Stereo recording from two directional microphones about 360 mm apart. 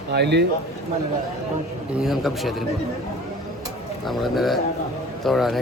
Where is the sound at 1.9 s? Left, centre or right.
Centre.